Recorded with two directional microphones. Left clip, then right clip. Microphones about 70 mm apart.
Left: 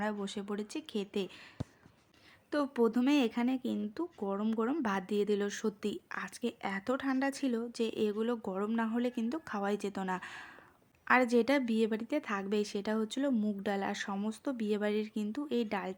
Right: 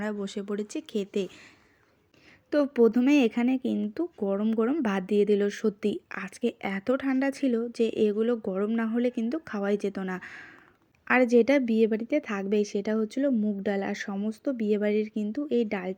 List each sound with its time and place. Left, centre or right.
0.0 s speech: right
2.5 s a woman's voice: right
10.1 s speech: centre
11.0 s a woman's voice: right